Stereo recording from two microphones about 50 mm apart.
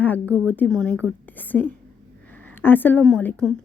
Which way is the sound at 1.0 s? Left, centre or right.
Left.